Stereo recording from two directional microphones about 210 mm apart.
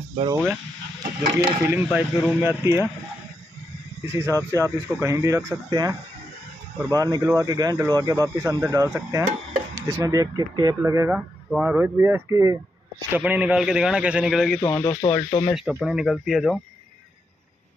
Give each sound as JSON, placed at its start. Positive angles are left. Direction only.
{"t": 0.1, "sound": "speech", "side_deg": -25}
{"t": 1.6, "sound": "speech", "side_deg": -10}
{"t": 4.1, "sound": "a man's voice", "side_deg": -15}
{"t": 14.6, "sound": "speech", "side_deg": 10}
{"t": 15.5, "sound": "a man's voice", "side_deg": 0}